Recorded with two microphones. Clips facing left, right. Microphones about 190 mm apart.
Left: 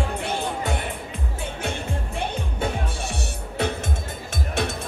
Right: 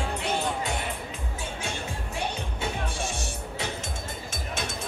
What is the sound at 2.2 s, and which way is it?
Music, 60° left (ahead or behind).